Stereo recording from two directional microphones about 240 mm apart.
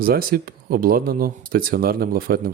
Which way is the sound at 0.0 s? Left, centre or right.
Right.